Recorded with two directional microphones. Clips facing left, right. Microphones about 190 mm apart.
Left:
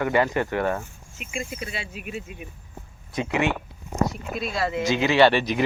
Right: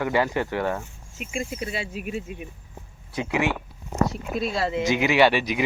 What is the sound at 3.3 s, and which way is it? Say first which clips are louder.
Speech: even; 10° right (ahead or behind).